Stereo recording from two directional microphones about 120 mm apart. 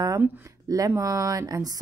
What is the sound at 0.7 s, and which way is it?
Speech, 30° right (ahead or behind).